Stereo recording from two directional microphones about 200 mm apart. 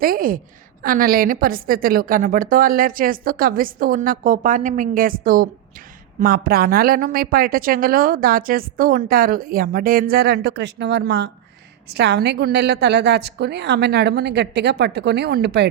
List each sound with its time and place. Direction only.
0.0 s a woman's voice: 45° right (ahead or behind)